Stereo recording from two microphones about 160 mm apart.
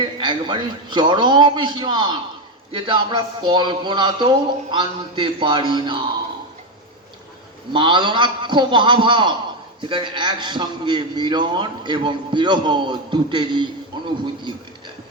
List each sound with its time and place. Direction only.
0.0 s a man's voice: 30° right (ahead or behind)
7.7 s a man's voice: 30° right (ahead or behind)